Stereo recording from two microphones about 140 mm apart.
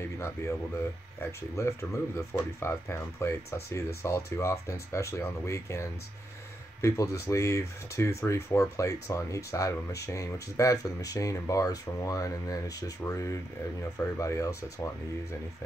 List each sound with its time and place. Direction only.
0.0 s speech: 20° left (ahead or behind)
1.5 s speech: 20° left (ahead or behind)